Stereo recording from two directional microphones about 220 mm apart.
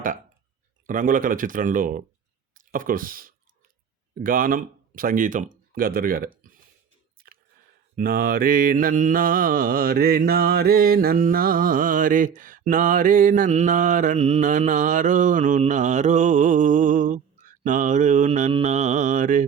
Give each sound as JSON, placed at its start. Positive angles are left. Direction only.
{"t": 0.9, "sound": "mantra", "side_deg": -40}
{"t": 4.1, "sound": "speech", "side_deg": -40}
{"t": 7.2, "sound": "chewing", "side_deg": -40}
{"t": 7.9, "sound": "mantra", "side_deg": -40}